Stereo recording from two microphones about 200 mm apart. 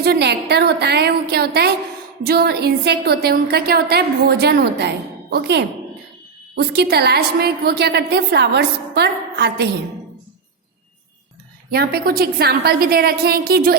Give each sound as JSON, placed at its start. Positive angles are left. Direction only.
{"t": 0.0, "sound": "a woman's voice", "side_deg": -55}
{"t": 11.7, "sound": "a woman's voice", "side_deg": -50}